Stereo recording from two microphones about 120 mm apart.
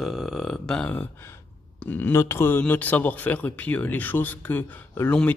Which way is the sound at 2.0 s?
20° left (ahead or behind).